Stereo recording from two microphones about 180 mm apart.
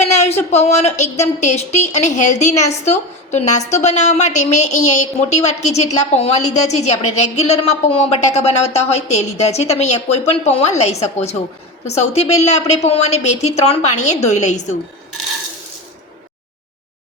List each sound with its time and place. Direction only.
0.0 s a woman's voice: 40° left (ahead or behind)